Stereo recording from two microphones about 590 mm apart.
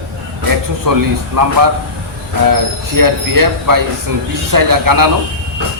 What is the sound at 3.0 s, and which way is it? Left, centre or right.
A man's voice, right.